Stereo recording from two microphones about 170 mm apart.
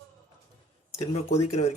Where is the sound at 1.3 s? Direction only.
40° left (ahead or behind).